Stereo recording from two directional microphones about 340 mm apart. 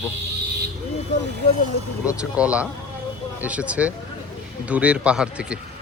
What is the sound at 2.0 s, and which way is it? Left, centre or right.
A man's voice, centre.